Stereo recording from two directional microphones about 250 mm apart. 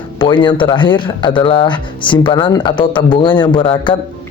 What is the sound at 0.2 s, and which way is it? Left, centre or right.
Speech, centre.